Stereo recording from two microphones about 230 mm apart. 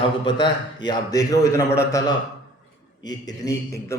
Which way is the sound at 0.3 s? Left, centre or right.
Centre.